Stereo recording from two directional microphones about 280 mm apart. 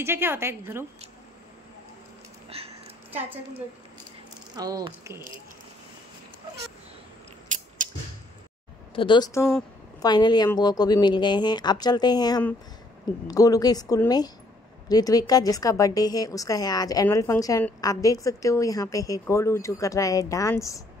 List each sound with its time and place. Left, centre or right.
0.0 s a woman's voice: centre
2.5 s speech: right
3.1 s a woman's voice: centre
4.6 s a woman's voice: centre
8.9 s a woman's voice: centre